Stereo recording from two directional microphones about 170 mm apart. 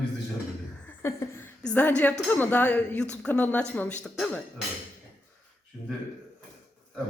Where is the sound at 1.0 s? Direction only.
15° left (ahead or behind).